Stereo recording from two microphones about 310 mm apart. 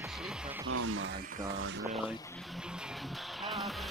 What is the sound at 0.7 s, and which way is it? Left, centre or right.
Speech, right.